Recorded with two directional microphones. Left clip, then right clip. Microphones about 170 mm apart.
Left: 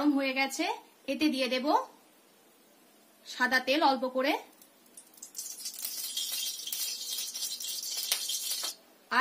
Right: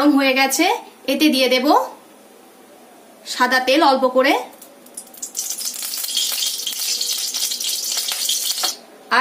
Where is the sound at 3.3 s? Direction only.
50° left (ahead or behind).